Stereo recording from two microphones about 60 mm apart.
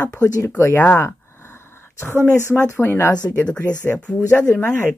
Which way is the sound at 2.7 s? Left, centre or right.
Left.